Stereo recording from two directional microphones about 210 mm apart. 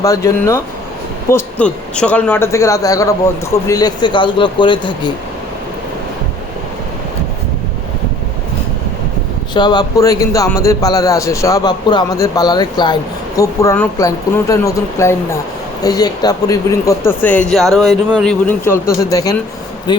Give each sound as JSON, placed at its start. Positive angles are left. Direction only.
{"t": 0.0, "sound": "speech", "side_deg": 15}
{"t": 9.6, "sound": "speech", "side_deg": 20}